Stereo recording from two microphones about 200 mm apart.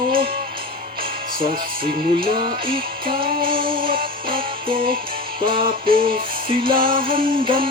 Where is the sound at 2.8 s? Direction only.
45° right (ahead or behind).